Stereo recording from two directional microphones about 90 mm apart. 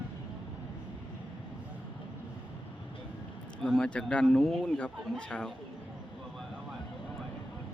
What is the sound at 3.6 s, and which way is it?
A man's voice, 5° left (ahead or behind).